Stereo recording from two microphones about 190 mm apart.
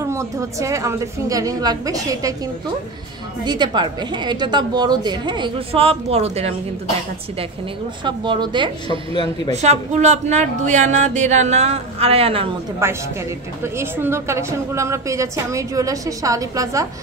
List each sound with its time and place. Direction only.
0.0 s a woman's voice: 15° right (ahead or behind)
3.4 s a woman's voice: 25° right (ahead or behind)
8.0 s a woman's voice: 25° right (ahead or behind)
9.2 s a woman's voice: 35° right (ahead or behind)
12.8 s a woman's voice: 15° right (ahead or behind)